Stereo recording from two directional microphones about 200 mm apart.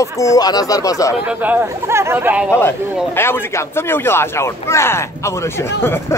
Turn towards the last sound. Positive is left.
turn(degrees=10)  # may be behind; listen again after turning